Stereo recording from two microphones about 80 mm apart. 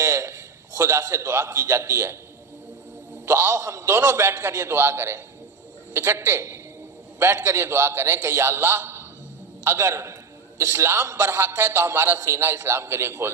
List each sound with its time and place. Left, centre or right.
0.8 s a man's voice: right
3.2 s a man's voice: right
3.6 s a man's voice: right
3.8 s a man's voice: right